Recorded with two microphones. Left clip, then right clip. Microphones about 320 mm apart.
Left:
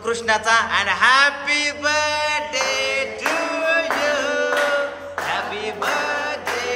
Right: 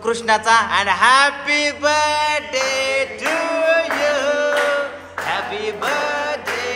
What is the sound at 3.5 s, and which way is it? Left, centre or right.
Music, centre.